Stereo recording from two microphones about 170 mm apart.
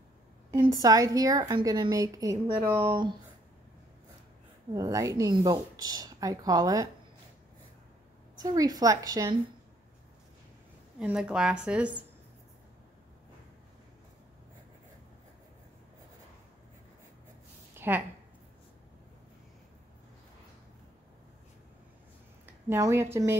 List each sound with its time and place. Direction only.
0.5 s a woman's voice: 25° right (ahead or behind)
4.7 s a woman's voice: 20° right (ahead or behind)
8.4 s a woman's voice: 20° right (ahead or behind)
11.0 s a woman's voice: 5° right (ahead or behind)
17.7 s a sound: 10° right (ahead or behind)
22.5 s speech: 15° right (ahead or behind)